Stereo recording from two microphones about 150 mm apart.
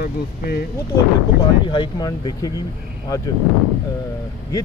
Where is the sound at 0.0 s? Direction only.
90° left.